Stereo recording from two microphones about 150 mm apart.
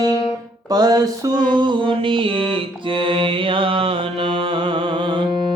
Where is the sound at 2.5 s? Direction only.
35° right (ahead or behind).